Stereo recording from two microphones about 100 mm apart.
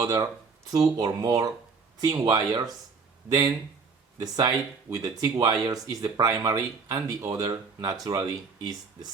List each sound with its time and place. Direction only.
0.0 s speech: 35° right (ahead or behind)